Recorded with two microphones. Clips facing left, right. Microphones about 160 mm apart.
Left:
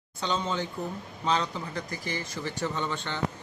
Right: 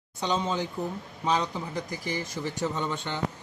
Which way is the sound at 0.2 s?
15° right (ahead or behind).